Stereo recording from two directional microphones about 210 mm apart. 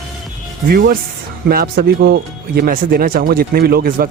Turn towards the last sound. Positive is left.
turn(degrees=-45)  # may be behind; listen again after turning